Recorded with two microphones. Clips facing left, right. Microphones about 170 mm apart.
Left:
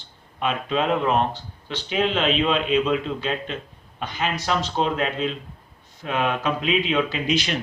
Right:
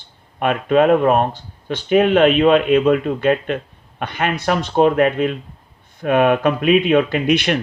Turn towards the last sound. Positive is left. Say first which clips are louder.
# right 7 dB
turn(degrees=-60)  # may be behind; listen again after turning